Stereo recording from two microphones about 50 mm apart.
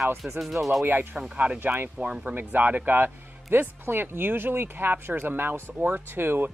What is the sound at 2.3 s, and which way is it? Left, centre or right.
Speech, right.